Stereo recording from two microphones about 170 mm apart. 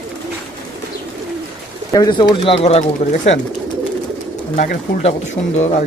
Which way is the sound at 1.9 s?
25° left (ahead or behind).